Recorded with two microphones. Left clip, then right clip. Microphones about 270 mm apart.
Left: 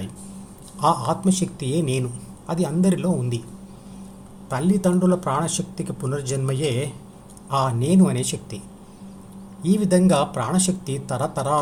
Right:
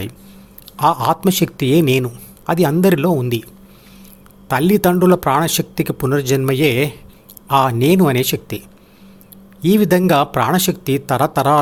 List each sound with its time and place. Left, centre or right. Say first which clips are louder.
0.8 s speech: right 6 dB; right
4.4 s speech: right 8 dB; right